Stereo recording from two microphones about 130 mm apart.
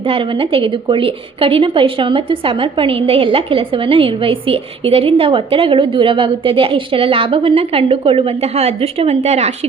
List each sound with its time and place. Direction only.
0.1 s a woman's voice: 45° right (ahead or behind)